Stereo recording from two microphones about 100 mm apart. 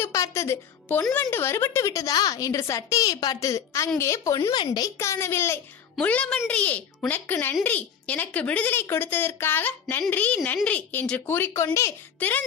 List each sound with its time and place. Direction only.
0.0 s music: 30° left (ahead or behind)
1.1 s a woman's voice: 20° left (ahead or behind); by 4.9 s 40° left (ahead or behind)
4.9 s a woman's voice: 30° left (ahead or behind)
5.9 s a woman's voice: 10° left (ahead or behind)